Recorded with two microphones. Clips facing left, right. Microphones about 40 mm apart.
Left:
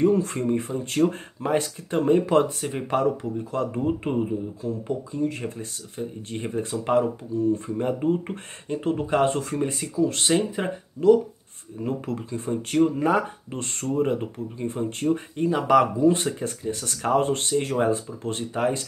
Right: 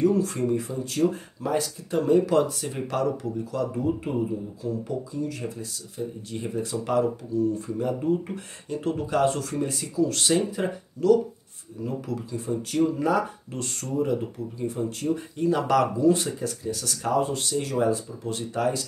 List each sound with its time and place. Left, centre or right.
0.0 s speech: left
11.8 s speech: left
15.5 s speech: centre
17.2 s speech: left
17.5 s speech: left